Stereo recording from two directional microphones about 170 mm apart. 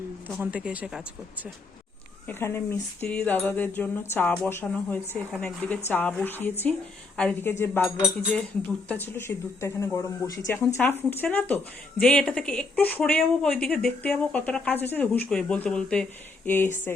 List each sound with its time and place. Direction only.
0.3 s speech: 10° right (ahead or behind)
2.2 s speech: 15° left (ahead or behind)
7.2 s cutlery: 5° left (ahead or behind)
7.6 s speech: 15° left (ahead or behind)
7.9 s cutlery: centre (ahead or behind)
8.9 s speech: 15° left (ahead or behind)